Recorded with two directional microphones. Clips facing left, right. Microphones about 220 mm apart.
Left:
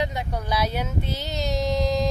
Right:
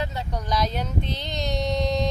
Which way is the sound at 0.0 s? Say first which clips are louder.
Left 2 dB; 15° left (ahead or behind).